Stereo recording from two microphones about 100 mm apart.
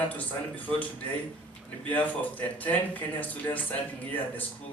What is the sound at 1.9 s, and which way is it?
Speech, 15° left (ahead or behind).